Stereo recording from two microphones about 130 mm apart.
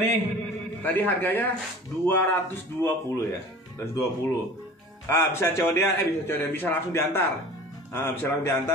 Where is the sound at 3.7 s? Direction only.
20° left (ahead or behind).